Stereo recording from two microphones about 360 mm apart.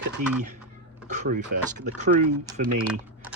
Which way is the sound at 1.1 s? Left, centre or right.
Right.